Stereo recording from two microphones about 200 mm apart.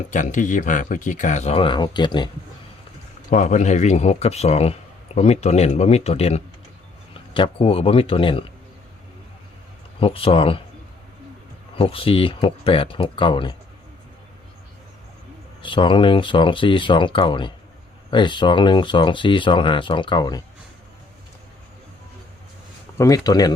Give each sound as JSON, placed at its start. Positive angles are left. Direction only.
{"t": 0.1, "sound": "speech", "side_deg": 40}
{"t": 3.2, "sound": "speech", "side_deg": 40}
{"t": 10.0, "sound": "speech", "side_deg": 25}
{"t": 11.8, "sound": "speech", "side_deg": 25}
{"t": 15.6, "sound": "speech", "side_deg": 25}
{"t": 23.0, "sound": "speech", "side_deg": 15}